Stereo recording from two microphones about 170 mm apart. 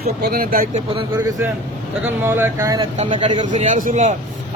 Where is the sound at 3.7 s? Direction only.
50° right (ahead or behind).